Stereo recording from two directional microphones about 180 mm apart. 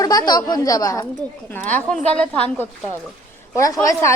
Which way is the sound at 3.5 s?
20° left (ahead or behind).